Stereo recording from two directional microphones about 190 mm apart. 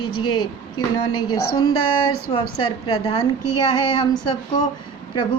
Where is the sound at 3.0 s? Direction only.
20° left (ahead or behind).